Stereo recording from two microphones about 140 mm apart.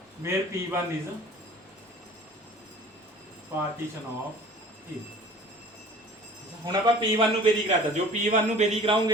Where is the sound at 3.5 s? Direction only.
20° right (ahead or behind).